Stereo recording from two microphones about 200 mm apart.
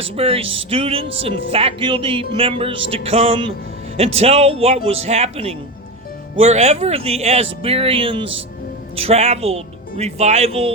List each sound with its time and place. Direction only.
0.0 s speech: 30° right (ahead or behind)